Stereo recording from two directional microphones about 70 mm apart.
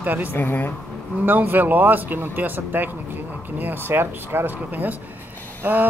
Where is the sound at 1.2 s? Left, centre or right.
Right.